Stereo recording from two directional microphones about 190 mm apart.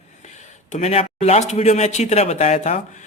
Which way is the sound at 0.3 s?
40° left (ahead or behind).